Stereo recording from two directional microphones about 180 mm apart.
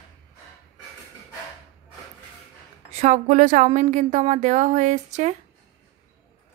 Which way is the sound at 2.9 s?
40° right (ahead or behind).